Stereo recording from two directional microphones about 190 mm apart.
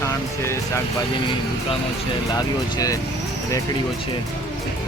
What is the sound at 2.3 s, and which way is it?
Speech, 20° left (ahead or behind).